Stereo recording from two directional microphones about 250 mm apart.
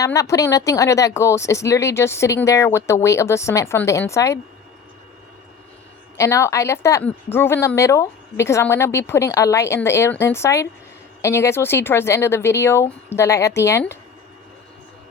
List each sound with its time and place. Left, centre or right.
0.0 s a woman's voice: centre
6.1 s a woman's voice: centre